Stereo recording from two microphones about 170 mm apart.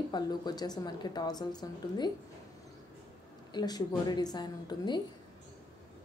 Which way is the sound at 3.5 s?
25° left (ahead or behind).